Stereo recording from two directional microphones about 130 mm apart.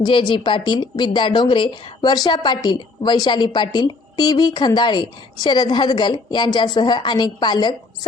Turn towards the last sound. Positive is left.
turn(degrees=35)  # may be behind; listen again after turning